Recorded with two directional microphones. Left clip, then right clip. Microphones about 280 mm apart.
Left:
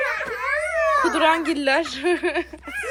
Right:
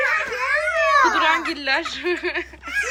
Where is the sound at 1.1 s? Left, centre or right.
Centre.